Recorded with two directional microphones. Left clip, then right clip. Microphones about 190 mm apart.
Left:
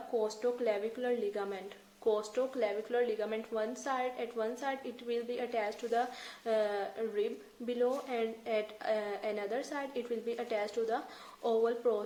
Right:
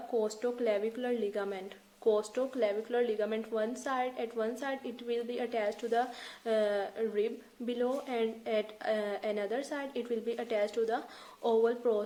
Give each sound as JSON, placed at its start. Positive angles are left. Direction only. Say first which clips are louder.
{"t": 0.2, "sound": "speech", "louder": "right 1 dB", "side_deg": -40}